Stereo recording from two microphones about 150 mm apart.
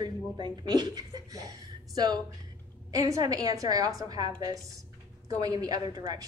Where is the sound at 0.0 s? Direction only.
30° right (ahead or behind).